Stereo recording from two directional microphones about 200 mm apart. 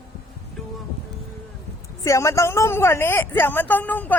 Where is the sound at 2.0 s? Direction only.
15° left (ahead or behind).